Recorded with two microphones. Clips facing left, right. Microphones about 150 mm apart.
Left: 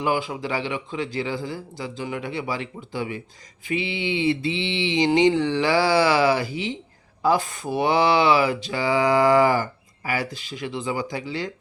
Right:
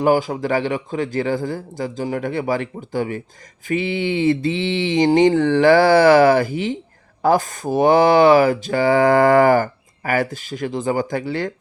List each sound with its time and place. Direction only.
0.0 s speech: 45° right (ahead or behind)